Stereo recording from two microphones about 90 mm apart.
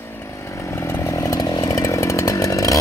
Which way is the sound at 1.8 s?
35° left (ahead or behind).